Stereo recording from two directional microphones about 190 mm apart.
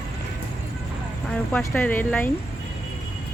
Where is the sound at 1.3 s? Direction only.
5° left (ahead or behind).